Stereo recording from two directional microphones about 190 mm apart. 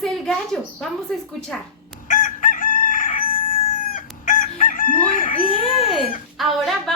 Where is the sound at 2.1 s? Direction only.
45° left (ahead or behind).